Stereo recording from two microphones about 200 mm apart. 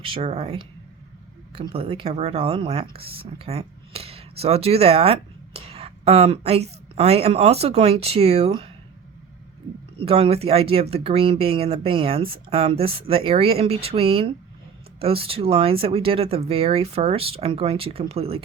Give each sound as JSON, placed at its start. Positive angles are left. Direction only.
{"t": 0.0, "sound": "speech", "side_deg": -30}
{"t": 10.0, "sound": "speech", "side_deg": -30}